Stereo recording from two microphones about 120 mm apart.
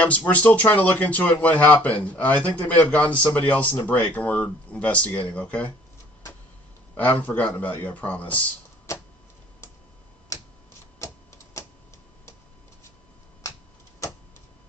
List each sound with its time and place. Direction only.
0.0 s speech: 10° left (ahead or behind)
7.0 s speech: 15° left (ahead or behind)
8.9 s a sound: 25° left (ahead or behind)
10.3 s tick-tock: 25° left (ahead or behind)